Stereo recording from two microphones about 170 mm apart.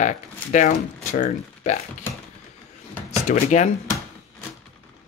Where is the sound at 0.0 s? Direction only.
45° left (ahead or behind).